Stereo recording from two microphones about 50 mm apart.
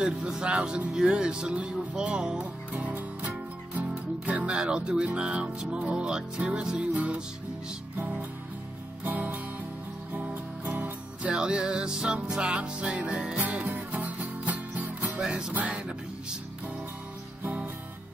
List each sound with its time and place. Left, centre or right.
0.0 s speech: centre
2.7 s music: right
4.5 s speech: centre
8.0 s music: right
10.6 s music: right
11.3 s speech: centre
13.4 s music: right
15.5 s speech: right